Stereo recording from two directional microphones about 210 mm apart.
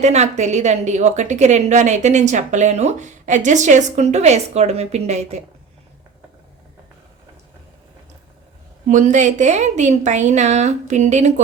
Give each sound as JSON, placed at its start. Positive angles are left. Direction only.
{"t": 0.0, "sound": "a woman's voice", "side_deg": -30}
{"t": 8.9, "sound": "a woman's voice", "side_deg": -35}